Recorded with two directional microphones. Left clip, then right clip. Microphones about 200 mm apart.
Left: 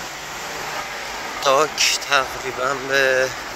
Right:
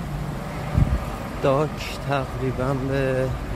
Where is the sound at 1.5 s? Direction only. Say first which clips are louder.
Left 7 dB; 5° right (ahead or behind).